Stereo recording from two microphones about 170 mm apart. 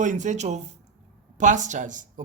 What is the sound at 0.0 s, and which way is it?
Speech, 45° right (ahead or behind).